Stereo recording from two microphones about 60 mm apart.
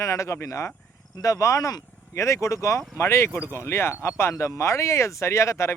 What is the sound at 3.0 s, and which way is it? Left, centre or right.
Speech, left.